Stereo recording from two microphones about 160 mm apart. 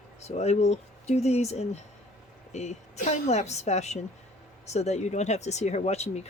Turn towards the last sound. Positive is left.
turn(degrees=45)  # may be behind; listen again after turning